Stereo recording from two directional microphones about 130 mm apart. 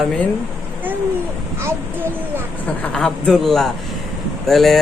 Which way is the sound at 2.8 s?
5° left (ahead or behind).